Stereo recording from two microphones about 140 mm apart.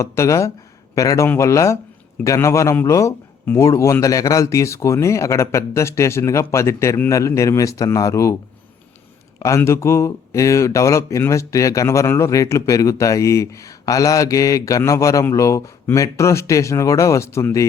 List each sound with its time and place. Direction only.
0.0 s speech: 20° left (ahead or behind)
9.4 s speech: 20° left (ahead or behind)